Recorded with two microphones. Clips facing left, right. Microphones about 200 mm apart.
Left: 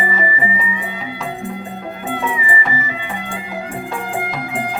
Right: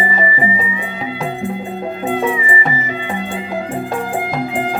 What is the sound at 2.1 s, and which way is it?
Music, 30° right (ahead or behind).